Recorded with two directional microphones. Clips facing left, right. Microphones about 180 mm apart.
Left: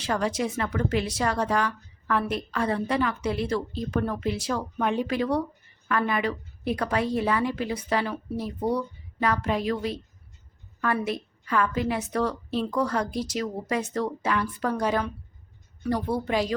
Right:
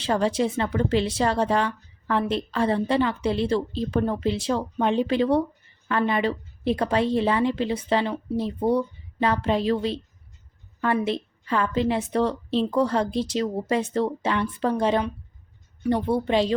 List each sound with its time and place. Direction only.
0.0 s a woman's voice: 30° right (ahead or behind)